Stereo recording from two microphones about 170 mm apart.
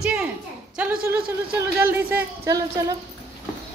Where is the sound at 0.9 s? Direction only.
60° right (ahead or behind).